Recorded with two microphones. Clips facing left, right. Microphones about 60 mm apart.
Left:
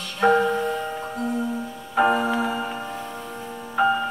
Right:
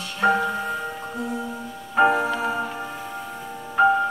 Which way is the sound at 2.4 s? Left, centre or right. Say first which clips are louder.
Even; left.